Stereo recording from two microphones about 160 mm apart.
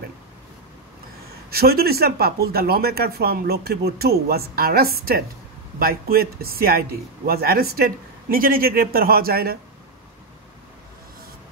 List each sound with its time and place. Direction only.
1.5 s speech: 75° right (ahead or behind)